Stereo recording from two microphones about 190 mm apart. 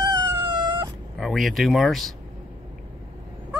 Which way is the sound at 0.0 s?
25° right (ahead or behind).